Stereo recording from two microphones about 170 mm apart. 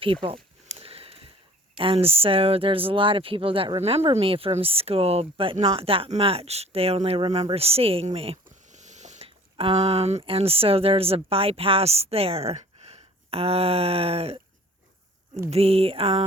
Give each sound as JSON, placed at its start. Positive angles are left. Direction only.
{"t": 0.0, "sound": "speech", "side_deg": -30}
{"t": 0.7, "sound": "a sound", "side_deg": -35}
{"t": 1.7, "sound": "speech", "side_deg": -30}
{"t": 8.4, "sound": "speech", "side_deg": -45}
{"t": 15.4, "sound": "speech", "side_deg": -35}